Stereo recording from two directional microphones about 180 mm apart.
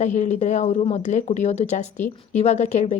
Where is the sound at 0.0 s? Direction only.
40° left (ahead or behind).